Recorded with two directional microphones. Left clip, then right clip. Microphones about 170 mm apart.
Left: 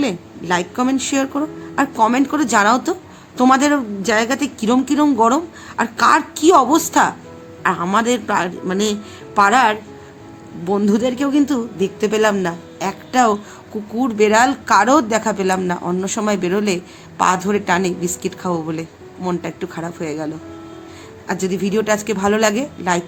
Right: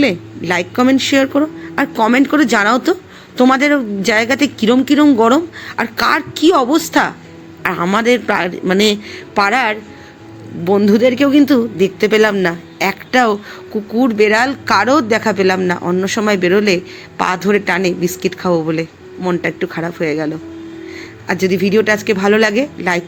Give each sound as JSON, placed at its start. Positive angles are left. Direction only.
{"t": 0.0, "sound": "a man's voice", "side_deg": -15}